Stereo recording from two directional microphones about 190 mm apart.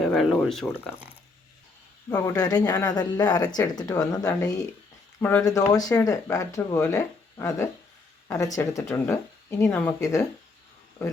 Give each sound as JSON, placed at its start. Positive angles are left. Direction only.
{"t": 0.0, "sound": "speech", "side_deg": 0}
{"t": 2.1, "sound": "speech", "side_deg": 5}
{"t": 2.4, "sound": "speech", "side_deg": 20}